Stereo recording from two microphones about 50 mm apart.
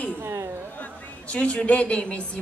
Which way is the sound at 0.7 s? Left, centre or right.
Left.